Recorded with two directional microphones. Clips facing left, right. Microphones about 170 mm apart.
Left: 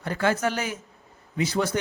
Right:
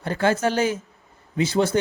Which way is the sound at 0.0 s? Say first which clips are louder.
Right 3 dB; 30° right (ahead or behind).